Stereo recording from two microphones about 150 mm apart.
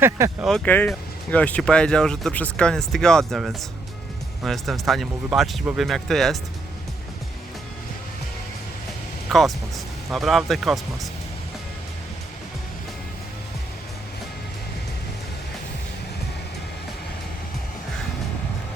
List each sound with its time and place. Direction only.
0.0 s speech: 15° right (ahead or behind)
0.4 s speech: 5° left (ahead or behind)
9.3 s speech: centre (ahead or behind)